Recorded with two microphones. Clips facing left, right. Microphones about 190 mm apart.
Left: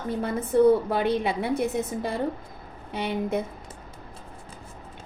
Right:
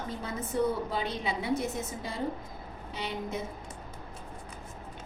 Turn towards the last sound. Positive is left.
turn(degrees=60)  # may be behind; listen again after turning